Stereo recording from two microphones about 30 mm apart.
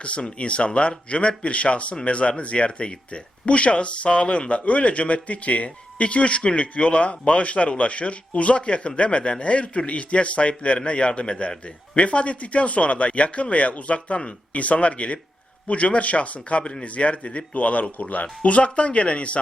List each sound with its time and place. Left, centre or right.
0.0 s speech: left